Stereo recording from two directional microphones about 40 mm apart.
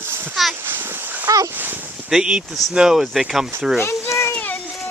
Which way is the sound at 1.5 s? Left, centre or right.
Right.